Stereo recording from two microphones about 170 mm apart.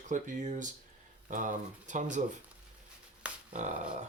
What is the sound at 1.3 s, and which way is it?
Speech, 50° right (ahead or behind).